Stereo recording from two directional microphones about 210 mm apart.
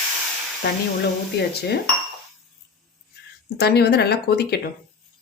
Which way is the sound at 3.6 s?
50° left (ahead or behind).